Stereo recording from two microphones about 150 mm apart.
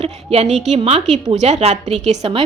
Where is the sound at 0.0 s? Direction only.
45° right (ahead or behind).